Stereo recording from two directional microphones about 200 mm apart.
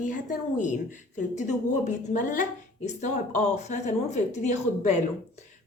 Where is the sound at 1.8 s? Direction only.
40° left (ahead or behind).